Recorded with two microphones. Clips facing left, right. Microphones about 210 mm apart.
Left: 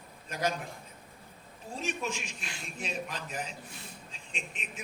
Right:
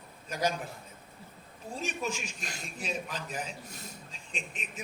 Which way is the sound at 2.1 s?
40° right (ahead or behind).